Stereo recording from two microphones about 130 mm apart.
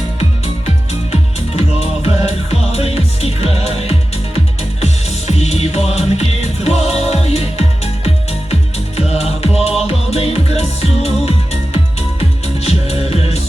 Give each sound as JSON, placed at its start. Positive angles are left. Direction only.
{"t": 1.1, "sound": "music", "side_deg": 50}
{"t": 5.4, "sound": "music", "side_deg": 55}
{"t": 9.0, "sound": "music", "side_deg": 50}